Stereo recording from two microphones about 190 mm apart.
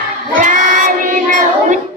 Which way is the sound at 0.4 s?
45° right (ahead or behind).